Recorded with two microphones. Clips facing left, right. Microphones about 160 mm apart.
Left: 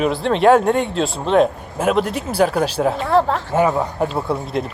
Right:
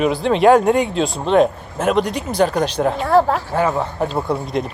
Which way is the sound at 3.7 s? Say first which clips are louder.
Even; 5° left (ahead or behind).